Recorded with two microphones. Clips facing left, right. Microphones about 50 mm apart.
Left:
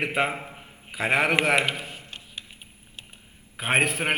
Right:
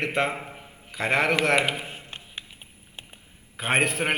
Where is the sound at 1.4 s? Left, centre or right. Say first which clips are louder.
Even; centre.